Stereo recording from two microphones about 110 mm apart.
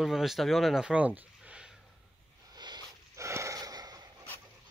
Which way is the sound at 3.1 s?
25° right (ahead or behind).